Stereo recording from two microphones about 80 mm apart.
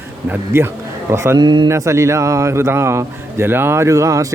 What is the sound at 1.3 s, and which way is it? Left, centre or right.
Speech, right.